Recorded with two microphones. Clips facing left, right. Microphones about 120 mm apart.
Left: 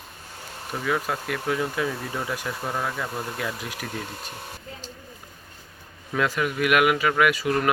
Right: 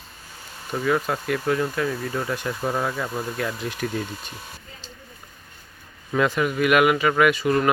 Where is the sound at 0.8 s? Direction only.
Centre (ahead or behind).